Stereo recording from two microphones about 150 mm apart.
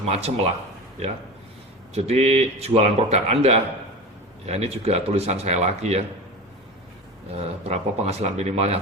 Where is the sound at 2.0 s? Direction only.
45° right (ahead or behind).